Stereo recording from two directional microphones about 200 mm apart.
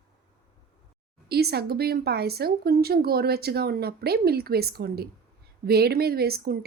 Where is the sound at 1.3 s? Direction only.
55° right (ahead or behind).